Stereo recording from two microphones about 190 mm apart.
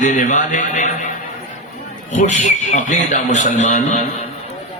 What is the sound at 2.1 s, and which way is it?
A man's voice, 40° left (ahead or behind).